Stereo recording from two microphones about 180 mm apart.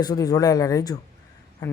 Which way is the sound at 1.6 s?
20° left (ahead or behind).